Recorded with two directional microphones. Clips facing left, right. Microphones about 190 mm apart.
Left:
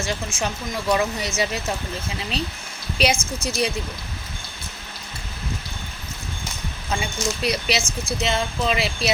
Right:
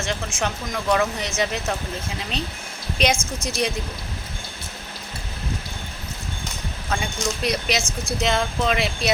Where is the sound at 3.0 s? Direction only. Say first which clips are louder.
Even; 5° left (ahead or behind).